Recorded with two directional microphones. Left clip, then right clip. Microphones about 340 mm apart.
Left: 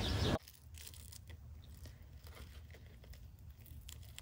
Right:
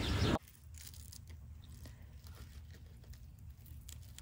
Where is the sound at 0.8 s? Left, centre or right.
Left.